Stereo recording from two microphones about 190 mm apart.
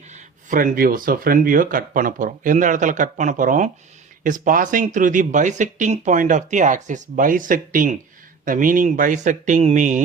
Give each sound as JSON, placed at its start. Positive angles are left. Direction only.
{"t": 0.1, "sound": "speech", "side_deg": -45}